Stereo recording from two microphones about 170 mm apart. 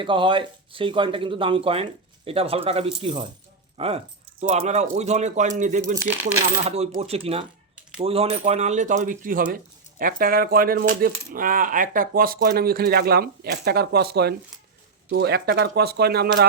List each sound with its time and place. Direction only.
0.0 s speech: 30° right (ahead or behind); by 5.8 s 45° right (ahead or behind)
5.8 s coin: 15° right (ahead or behind)
6.7 s speech: 35° right (ahead or behind); by 16.5 s 70° right (ahead or behind)